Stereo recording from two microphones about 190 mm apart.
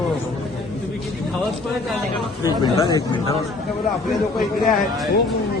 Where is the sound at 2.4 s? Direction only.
25° left (ahead or behind).